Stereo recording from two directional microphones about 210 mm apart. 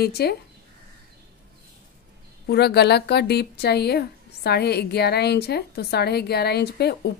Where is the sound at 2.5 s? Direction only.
50° left (ahead or behind).